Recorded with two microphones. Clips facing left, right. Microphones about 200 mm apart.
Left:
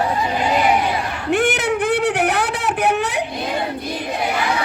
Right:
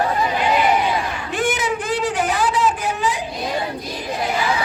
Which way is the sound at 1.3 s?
65° left (ahead or behind).